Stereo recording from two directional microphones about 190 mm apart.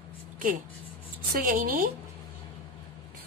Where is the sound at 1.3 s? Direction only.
45° right (ahead or behind).